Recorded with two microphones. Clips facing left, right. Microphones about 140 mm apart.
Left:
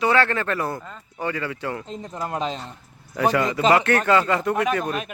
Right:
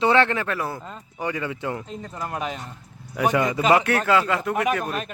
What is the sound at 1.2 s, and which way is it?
Speech, 15° right (ahead or behind).